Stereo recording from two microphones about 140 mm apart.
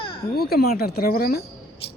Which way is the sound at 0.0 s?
40° left (ahead or behind).